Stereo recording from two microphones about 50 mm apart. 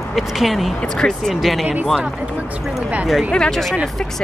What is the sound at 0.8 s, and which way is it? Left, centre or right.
Speech, centre.